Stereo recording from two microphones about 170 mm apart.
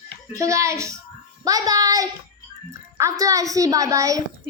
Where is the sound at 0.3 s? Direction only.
20° right (ahead or behind).